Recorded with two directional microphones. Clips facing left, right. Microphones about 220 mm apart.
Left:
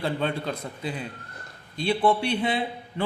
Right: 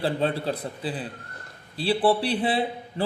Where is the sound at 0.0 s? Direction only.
35° right (ahead or behind).